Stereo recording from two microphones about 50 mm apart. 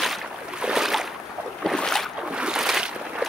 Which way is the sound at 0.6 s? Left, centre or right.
Centre.